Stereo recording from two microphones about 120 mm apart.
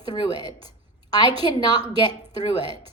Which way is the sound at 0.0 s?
40° left (ahead or behind).